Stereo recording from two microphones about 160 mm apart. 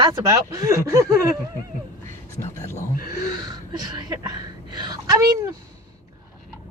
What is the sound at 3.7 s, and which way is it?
Speech, 25° right (ahead or behind).